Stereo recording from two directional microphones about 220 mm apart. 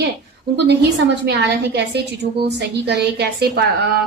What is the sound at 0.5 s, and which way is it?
A woman's voice, 50° right (ahead or behind).